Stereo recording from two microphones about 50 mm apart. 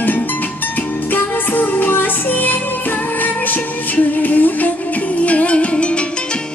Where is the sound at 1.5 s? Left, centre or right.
Left.